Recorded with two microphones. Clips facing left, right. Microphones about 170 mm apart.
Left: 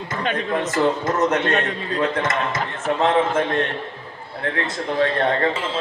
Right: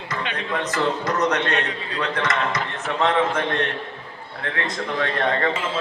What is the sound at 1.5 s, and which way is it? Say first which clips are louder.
Speech: left 3 dB; 45° left (ahead or behind).